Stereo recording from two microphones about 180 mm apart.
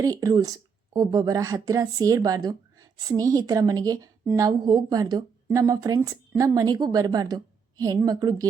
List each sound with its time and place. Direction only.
0.0 s speech: 20° right (ahead or behind)